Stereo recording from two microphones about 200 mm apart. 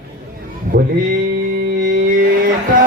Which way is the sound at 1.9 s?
40° right (ahead or behind).